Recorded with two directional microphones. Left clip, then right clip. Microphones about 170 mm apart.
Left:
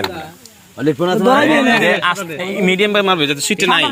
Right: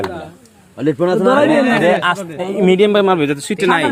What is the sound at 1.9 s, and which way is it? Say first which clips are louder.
A man's voice: right 1 dB; 45° right (ahead or behind).